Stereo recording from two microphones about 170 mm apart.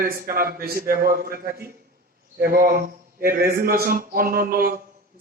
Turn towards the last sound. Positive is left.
turn(degrees=-60)  # may be behind; listen again after turning